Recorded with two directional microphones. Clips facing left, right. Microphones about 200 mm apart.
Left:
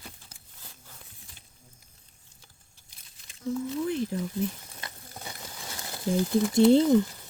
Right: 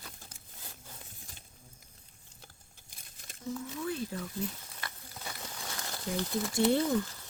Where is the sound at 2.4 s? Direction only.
50° right (ahead or behind).